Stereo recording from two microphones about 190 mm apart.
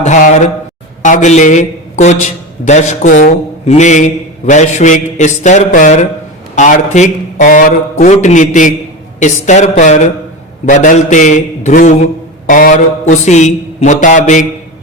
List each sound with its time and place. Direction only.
0.0 s a man's voice: 40° left (ahead or behind)